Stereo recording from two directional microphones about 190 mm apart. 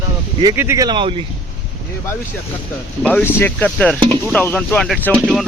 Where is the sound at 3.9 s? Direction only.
25° right (ahead or behind).